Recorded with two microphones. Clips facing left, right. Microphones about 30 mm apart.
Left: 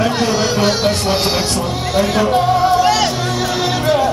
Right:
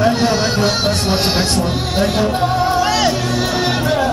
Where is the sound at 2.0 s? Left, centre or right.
Left.